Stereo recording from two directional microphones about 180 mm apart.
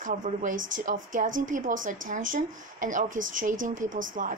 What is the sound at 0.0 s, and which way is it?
A woman's voice, 45° right (ahead or behind).